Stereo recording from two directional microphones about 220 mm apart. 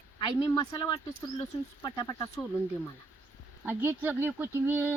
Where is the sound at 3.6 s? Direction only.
10° right (ahead or behind).